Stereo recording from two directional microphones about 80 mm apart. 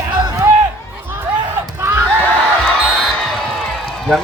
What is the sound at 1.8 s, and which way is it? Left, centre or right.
Crowd, right.